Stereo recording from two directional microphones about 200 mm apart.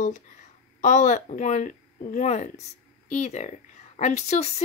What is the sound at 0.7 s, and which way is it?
A woman's voice, 40° left (ahead or behind).